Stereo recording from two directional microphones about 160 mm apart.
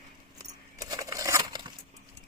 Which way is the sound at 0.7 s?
20° right (ahead or behind).